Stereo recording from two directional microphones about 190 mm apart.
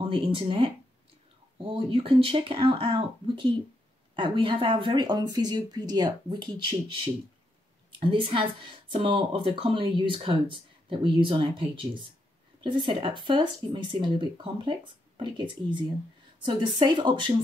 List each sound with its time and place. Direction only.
0.0 s a woman's voice: 25° right (ahead or behind)
1.7 s a woman's voice: 30° right (ahead or behind)
8.0 s a woman's voice: 25° right (ahead or behind)